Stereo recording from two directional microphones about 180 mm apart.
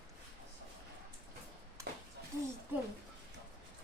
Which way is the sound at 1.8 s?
15° right (ahead or behind).